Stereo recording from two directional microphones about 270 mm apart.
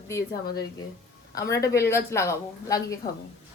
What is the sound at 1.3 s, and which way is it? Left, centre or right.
Speech, centre.